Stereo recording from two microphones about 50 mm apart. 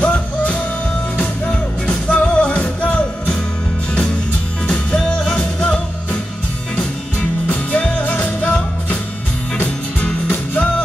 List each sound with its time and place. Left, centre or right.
0.0 s music: left
4.6 s music: centre
7.2 s music: left
9.9 s music: left